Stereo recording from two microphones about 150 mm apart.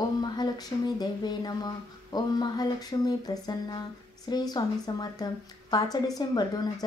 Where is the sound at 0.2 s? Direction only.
30° left (ahead or behind).